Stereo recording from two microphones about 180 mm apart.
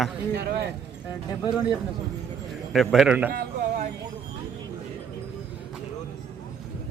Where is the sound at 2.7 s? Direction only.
Centre (ahead or behind).